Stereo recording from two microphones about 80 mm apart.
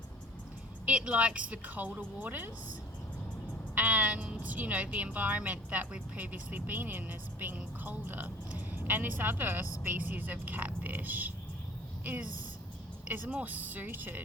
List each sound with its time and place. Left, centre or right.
0.9 s a woman's voice: centre
3.8 s a woman's voice: right